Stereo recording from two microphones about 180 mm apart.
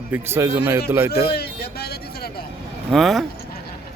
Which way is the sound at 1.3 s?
60° left (ahead or behind).